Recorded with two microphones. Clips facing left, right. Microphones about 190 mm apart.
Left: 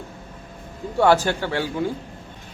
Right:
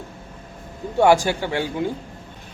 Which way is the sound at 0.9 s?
15° right (ahead or behind).